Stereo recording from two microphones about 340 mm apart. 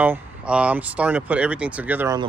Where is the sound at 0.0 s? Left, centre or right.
Centre.